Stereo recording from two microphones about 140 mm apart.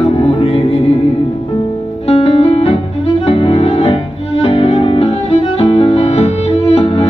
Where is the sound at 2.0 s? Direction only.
45° left (ahead or behind).